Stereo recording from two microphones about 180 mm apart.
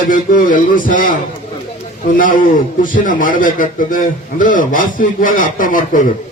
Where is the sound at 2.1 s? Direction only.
50° left (ahead or behind).